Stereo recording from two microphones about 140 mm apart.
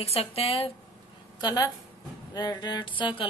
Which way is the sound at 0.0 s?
45° left (ahead or behind).